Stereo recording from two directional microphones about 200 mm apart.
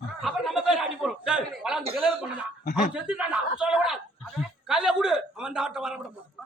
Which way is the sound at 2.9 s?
5° right (ahead or behind).